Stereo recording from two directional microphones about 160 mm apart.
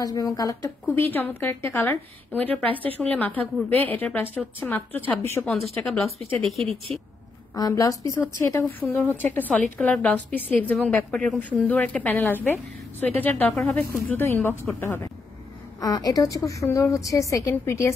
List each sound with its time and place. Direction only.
0.0 s a woman's voice: 20° left (ahead or behind); by 6.0 s centre (ahead or behind)
7.5 s a woman's voice: 25° left (ahead or behind)